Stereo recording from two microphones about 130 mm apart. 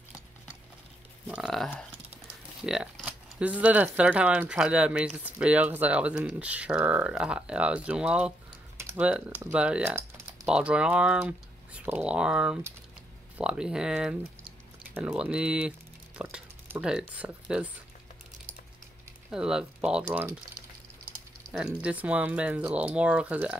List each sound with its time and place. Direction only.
1.4 s speech: 5° left (ahead or behind)
2.2 s speech: 5° right (ahead or behind)
16.2 s a sound: 10° right (ahead or behind)
16.9 s speech: 10° right (ahead or behind)
19.3 s speech: 5° right (ahead or behind)
20.1 s speech: 20° right (ahead or behind)
21.5 s speech: 10° right (ahead or behind)